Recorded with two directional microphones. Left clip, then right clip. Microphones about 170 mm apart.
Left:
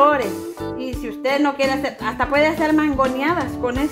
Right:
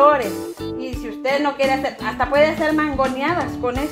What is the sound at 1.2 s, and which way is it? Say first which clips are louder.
Speech: even; 40° left (ahead or behind).